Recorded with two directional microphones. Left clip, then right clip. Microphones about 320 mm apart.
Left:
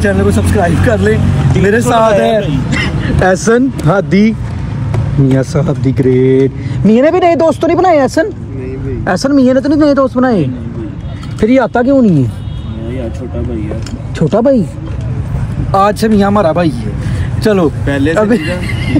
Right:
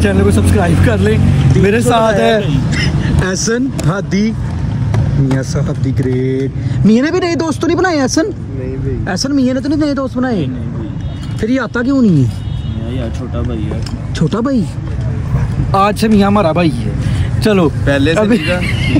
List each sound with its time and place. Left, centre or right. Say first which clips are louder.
0.0 s speech: left 1 dB; centre
5.9 s speech: left 8 dB; left
6.9 s speech: left 6 dB; centre
9.0 s speech: left 6 dB; centre
11.3 s speech: left 7 dB; centre
14.3 s speech: left 8 dB; centre
15.7 s speech: left 2 dB; centre
17.8 s speech: right 1 dB; right
18.1 s speech: left 1 dB; centre